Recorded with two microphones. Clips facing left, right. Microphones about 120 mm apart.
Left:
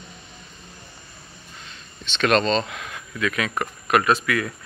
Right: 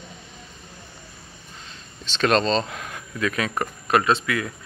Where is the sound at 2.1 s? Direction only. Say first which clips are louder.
Even; 30° right (ahead or behind).